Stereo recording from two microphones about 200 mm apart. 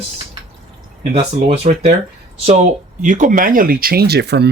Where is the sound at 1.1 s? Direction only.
30° right (ahead or behind).